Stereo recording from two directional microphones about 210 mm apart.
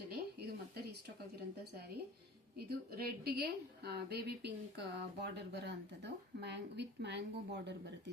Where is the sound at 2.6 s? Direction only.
45° right (ahead or behind).